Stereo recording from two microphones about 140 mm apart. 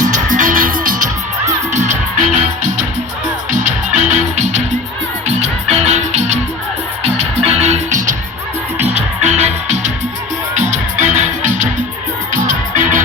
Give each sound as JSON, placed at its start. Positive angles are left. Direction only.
{"t": 0.0, "sound": "music", "side_deg": -65}
{"t": 1.7, "sound": "music", "side_deg": -60}
{"t": 9.2, "sound": "music", "side_deg": -55}